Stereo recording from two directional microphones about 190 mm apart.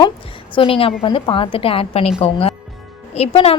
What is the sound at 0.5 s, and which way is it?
A woman's voice, 30° left (ahead or behind).